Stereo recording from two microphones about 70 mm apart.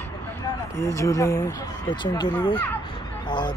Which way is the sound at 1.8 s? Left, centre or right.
Left.